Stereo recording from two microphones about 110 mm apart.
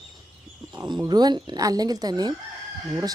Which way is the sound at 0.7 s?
40° right (ahead or behind).